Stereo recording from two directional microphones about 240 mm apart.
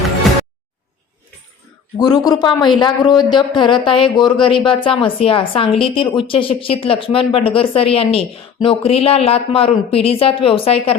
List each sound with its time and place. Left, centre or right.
2.0 s speech: centre